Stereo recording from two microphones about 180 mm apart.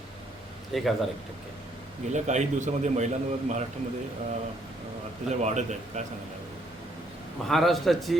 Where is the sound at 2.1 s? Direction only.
40° right (ahead or behind).